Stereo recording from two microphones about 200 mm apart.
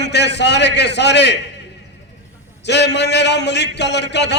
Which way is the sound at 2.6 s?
60° left (ahead or behind).